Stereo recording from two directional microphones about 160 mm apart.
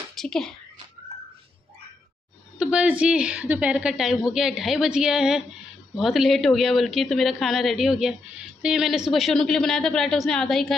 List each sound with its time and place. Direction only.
0.1 s speech: 5° left (ahead or behind)
2.6 s a woman's voice: 5° right (ahead or behind)